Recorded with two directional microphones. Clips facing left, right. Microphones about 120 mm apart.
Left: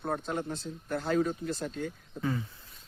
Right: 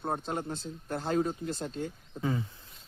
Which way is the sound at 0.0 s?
30° right (ahead or behind).